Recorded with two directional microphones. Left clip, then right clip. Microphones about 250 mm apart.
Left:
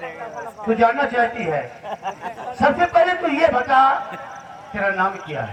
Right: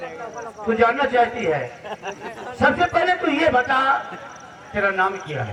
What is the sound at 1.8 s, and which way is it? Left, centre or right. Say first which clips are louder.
Speech: left 3 dB; centre.